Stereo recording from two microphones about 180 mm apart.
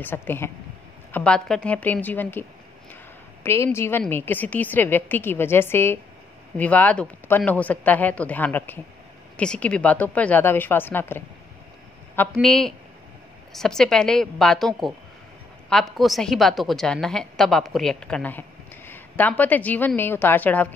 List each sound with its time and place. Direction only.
0.0 s speech: 10° left (ahead or behind)
3.4 s a woman's voice: 15° left (ahead or behind)